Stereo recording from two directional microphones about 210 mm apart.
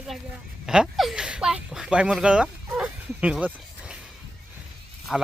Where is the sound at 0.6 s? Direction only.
5° right (ahead or behind).